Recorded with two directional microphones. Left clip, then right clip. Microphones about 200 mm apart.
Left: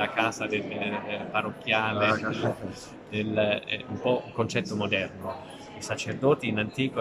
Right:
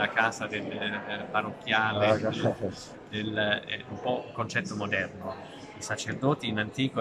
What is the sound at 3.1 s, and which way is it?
A man's voice, 10° left (ahead or behind).